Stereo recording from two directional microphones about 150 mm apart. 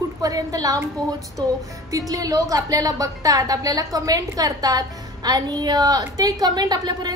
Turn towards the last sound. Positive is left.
turn(degrees=-25)  # may be behind; listen again after turning